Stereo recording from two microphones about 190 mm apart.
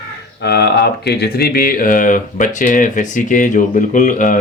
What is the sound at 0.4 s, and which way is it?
Speech, 60° left (ahead or behind).